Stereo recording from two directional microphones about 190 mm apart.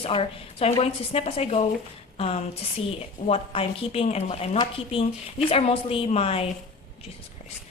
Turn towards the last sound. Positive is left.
turn(degrees=30)  # may be behind; listen again after turning